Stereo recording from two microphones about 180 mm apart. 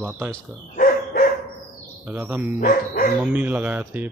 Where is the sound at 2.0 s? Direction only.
10° right (ahead or behind).